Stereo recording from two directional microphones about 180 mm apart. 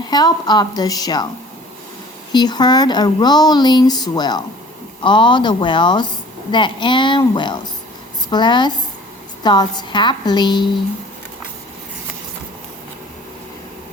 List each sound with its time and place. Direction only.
0.1 s speech: 25° left (ahead or behind)
2.3 s speech: 25° left (ahead or behind)